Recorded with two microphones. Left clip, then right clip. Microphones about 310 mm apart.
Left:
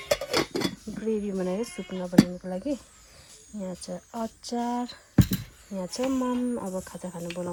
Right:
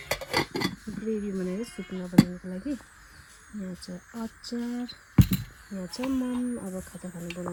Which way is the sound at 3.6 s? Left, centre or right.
Left.